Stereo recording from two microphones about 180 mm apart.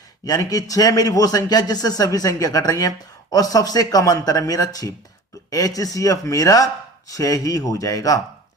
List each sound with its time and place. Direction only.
0.3 s a man's voice: 20° left (ahead or behind)